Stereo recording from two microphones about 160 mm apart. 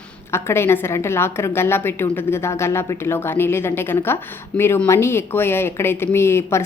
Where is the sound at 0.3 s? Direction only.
15° left (ahead or behind).